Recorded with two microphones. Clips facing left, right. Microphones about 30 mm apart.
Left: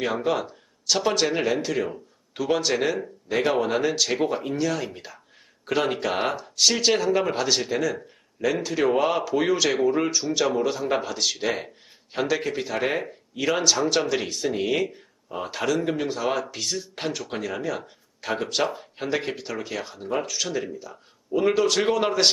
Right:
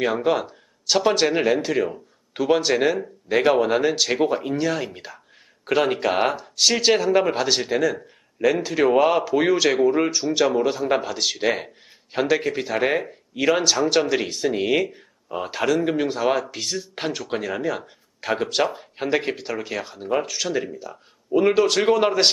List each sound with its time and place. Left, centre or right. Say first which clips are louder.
0.0 s speech: right 4 dB; centre
14.8 s a sound: right 3 dB; centre
15.5 s speech: right 4 dB; centre